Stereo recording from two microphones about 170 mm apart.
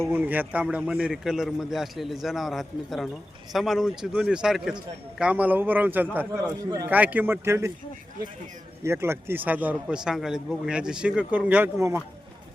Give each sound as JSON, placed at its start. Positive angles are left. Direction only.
{"t": 0.1, "sound": "a man's voice", "side_deg": -10}
{"t": 8.8, "sound": "speech", "side_deg": -15}